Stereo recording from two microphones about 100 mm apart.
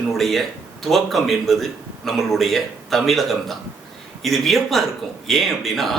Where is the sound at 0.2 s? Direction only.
Centre (ahead or behind).